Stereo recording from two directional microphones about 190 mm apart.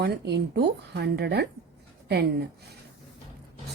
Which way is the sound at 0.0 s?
60° right (ahead or behind).